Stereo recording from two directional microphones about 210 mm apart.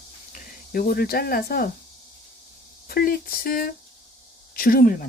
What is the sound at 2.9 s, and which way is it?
Speech, 45° left (ahead or behind).